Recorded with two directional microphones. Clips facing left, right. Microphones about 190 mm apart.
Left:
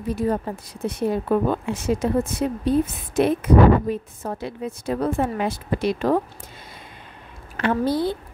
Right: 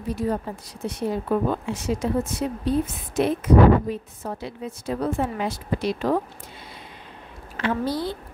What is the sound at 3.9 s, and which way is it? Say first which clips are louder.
A woman's voice: left 3 dB; 50° left (ahead or behind).